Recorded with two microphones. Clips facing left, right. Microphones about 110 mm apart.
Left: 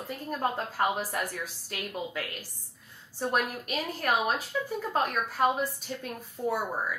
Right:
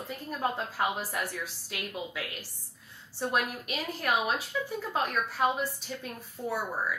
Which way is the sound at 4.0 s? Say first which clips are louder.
Left 1 dB; 45° left (ahead or behind).